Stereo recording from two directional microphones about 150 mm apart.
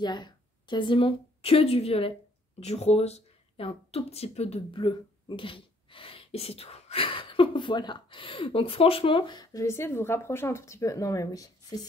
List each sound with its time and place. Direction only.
0.0 s a woman's voice: 30° left (ahead or behind)